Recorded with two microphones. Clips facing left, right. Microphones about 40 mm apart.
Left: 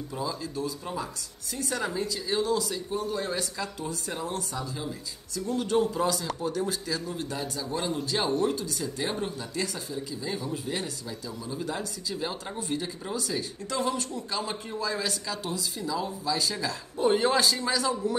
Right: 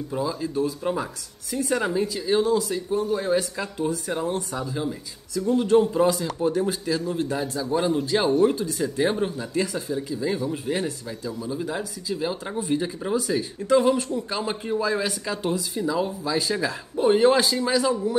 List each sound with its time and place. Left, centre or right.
0.1 s speech: centre
3.5 s speech: right
5.9 s speech: right
11.2 s speech: centre